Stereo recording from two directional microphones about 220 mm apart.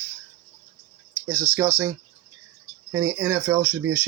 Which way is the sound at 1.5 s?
15° right (ahead or behind).